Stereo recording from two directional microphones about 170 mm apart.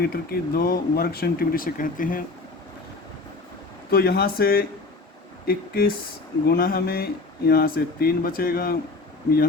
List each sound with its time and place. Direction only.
0.0 s speech: 65° left (ahead or behind)
3.9 s speech: 65° left (ahead or behind)